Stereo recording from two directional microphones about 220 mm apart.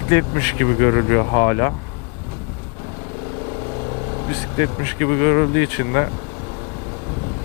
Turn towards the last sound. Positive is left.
turn(degrees=15)  # may be behind; listen again after turning